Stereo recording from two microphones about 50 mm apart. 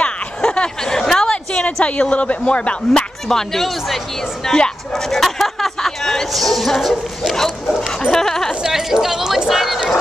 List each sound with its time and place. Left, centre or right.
0.4 s a sound: centre
2.4 s speech: left; by 4.0 s centre
4.5 s speech: centre
7.6 s speech: centre
8.1 s speech: centre
8.6 s speech: centre